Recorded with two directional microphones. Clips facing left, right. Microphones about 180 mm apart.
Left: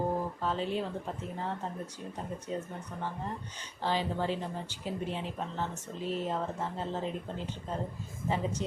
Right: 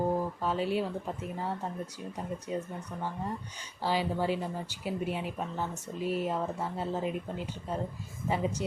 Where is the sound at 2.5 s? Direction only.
30° left (ahead or behind).